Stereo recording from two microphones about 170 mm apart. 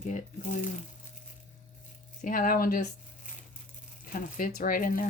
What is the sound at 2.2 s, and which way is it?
Speech, 55° left (ahead or behind).